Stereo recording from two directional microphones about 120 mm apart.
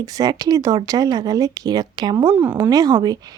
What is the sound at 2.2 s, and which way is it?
Speech, 15° right (ahead or behind).